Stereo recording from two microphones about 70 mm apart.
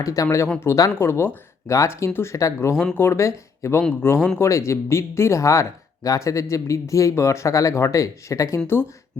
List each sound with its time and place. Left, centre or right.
0.0 s speech: left